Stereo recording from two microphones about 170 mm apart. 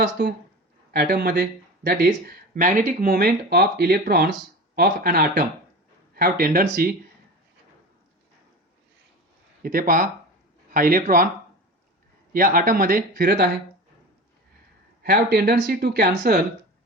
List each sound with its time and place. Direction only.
0.9 s speech: 65° right (ahead or behind)
2.6 s speech: 50° right (ahead or behind)
9.6 s speech: 55° right (ahead or behind)
12.3 s speech: 55° right (ahead or behind)
15.0 s speech: 65° right (ahead or behind)